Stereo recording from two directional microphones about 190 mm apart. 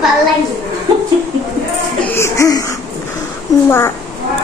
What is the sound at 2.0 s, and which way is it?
Music, 15° left (ahead or behind).